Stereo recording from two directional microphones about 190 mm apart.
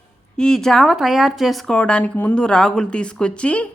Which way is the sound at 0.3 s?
5° left (ahead or behind).